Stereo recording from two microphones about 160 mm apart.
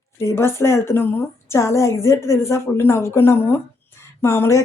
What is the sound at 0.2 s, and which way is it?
A woman's voice, 15° left (ahead or behind).